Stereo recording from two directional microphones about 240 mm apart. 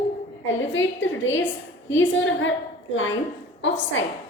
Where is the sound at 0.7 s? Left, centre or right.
Left.